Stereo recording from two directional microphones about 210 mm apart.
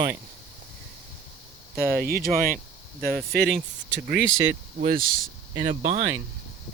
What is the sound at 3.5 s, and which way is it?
Speech, 55° right (ahead or behind).